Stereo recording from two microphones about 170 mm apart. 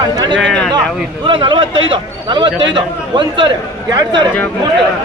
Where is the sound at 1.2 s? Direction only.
30° right (ahead or behind).